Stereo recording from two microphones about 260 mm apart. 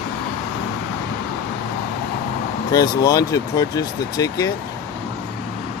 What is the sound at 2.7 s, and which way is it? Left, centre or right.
Speech, centre.